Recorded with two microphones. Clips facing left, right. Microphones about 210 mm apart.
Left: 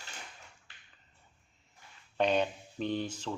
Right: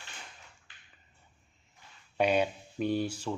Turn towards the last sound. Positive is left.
turn(degrees=-10)  # may be behind; listen again after turning